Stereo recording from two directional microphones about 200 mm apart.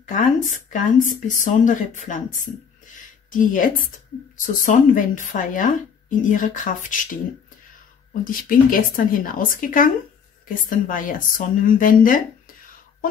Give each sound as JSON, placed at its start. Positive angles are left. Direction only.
{"t": 0.0, "sound": "a woman's voice", "side_deg": 40}
{"t": 3.3, "sound": "a woman's voice", "side_deg": 45}
{"t": 8.1, "sound": "a woman's voice", "side_deg": 45}